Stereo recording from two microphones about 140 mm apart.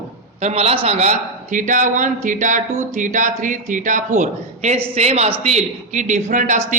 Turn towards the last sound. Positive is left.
turn(degrees=-60)  # may be behind; listen again after turning